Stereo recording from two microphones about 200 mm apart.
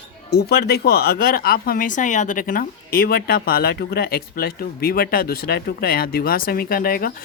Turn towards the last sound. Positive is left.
turn(degrees=45)  # may be behind; listen again after turning